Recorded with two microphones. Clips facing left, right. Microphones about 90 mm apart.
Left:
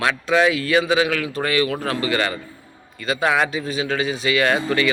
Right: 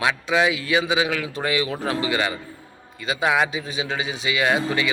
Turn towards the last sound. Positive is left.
turn(degrees=-15)  # may be behind; listen again after turning